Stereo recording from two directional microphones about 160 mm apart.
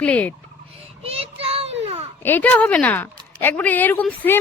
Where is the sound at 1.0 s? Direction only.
35° right (ahead or behind).